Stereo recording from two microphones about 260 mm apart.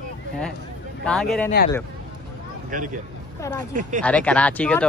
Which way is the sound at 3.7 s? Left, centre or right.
Right.